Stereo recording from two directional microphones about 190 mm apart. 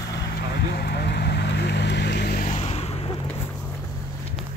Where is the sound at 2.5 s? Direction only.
30° left (ahead or behind).